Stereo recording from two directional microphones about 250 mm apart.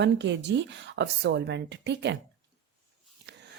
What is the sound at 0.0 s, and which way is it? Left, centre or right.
Speech, right.